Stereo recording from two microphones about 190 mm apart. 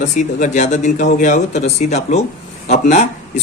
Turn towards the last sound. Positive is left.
turn(degrees=35)  # may be behind; listen again after turning